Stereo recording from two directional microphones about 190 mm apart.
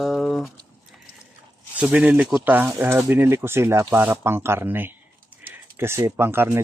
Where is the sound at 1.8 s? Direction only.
5° right (ahead or behind).